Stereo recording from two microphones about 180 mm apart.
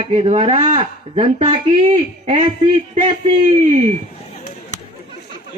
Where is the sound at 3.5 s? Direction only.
35° right (ahead or behind).